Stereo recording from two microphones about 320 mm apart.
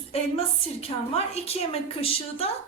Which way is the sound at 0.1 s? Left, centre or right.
Centre.